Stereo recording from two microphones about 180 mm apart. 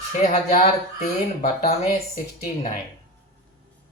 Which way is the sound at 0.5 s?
45° left (ahead or behind).